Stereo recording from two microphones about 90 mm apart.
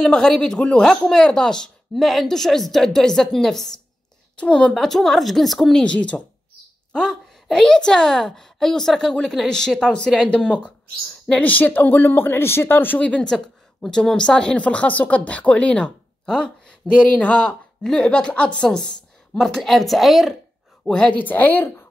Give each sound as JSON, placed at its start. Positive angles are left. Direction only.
{"t": 0.0, "sound": "a woman's voice", "side_deg": 5}
{"t": 21.2, "sound": "speech", "side_deg": 20}